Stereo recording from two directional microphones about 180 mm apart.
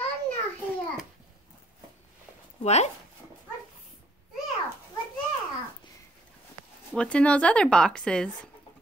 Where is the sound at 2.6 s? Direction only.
35° left (ahead or behind).